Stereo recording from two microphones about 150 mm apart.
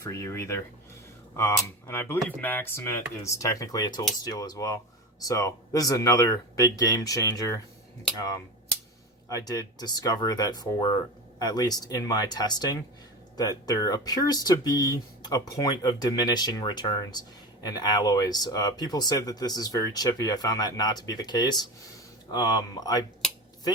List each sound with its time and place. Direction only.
0.0 s speech: 20° left (ahead or behind)
9.3 s speech: 25° left (ahead or behind)